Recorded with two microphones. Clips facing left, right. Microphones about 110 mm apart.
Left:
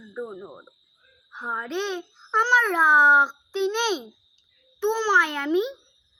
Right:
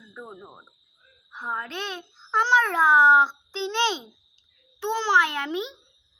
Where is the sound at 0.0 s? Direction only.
Centre (ahead or behind); by 5.7 s 20° right (ahead or behind).